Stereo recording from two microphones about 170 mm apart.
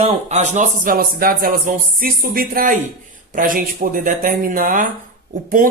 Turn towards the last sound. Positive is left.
turn(degrees=-55)  # may be behind; listen again after turning